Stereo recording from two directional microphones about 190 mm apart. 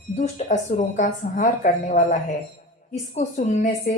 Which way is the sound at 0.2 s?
40° left (ahead or behind).